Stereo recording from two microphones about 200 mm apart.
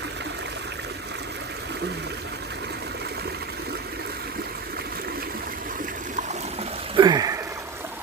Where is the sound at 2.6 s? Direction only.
55° right (ahead or behind).